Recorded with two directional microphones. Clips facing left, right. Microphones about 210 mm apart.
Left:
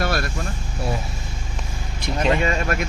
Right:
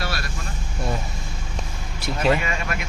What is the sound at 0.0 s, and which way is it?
Vehicle, 50° left (ahead or behind).